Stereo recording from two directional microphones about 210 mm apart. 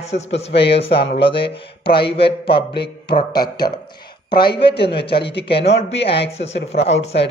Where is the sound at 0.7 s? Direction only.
25° left (ahead or behind).